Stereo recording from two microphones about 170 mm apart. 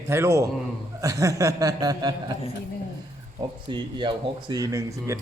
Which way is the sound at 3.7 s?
25° right (ahead or behind).